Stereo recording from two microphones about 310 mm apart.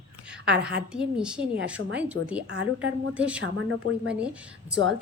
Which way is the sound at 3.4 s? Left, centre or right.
Right.